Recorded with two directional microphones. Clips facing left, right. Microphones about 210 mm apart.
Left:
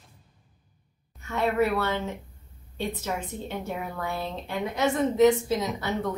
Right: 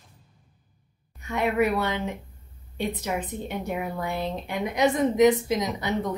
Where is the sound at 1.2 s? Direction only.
15° right (ahead or behind).